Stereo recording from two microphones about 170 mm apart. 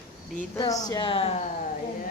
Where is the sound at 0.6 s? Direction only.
20° left (ahead or behind).